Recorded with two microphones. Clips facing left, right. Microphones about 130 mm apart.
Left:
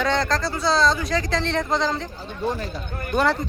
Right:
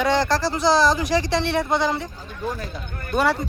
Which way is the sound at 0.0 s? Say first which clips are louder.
Right 2 dB; 10° right (ahead or behind).